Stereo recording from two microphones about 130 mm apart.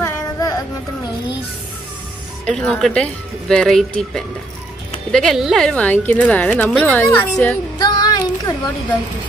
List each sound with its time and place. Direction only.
0.0 s music: 25° left (ahead or behind)
2.4 s a woman's voice: 10° left (ahead or behind)
7.8 s a sound: 30° left (ahead or behind)